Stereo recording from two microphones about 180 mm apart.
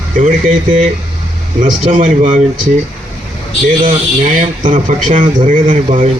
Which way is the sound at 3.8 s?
45° right (ahead or behind).